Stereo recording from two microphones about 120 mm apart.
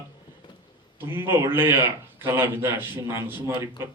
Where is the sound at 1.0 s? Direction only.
20° right (ahead or behind).